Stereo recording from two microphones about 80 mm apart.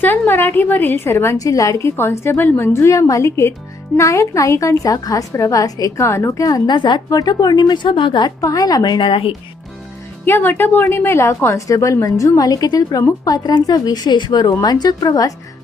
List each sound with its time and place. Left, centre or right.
0.0 s a woman's voice: left
1.4 s a woman's voice: left
2.0 s a woman's voice: left
6.0 s a woman's voice: left
6.7 s a woman's voice: left
7.1 s a woman's voice: left
8.4 s a woman's voice: left
10.2 s a woman's voice: left
13.2 s a woman's voice: left